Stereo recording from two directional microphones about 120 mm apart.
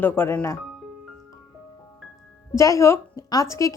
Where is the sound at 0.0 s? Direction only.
20° left (ahead or behind).